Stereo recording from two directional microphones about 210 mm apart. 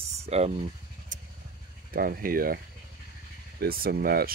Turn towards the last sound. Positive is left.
turn(degrees=-45)  # may be behind; listen again after turning